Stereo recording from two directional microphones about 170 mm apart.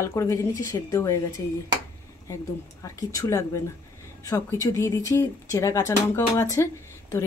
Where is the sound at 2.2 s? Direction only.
20° left (ahead or behind).